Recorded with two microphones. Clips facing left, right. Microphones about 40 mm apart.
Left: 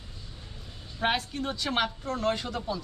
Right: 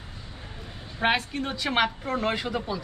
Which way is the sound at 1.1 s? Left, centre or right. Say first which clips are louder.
Right 3 dB; centre.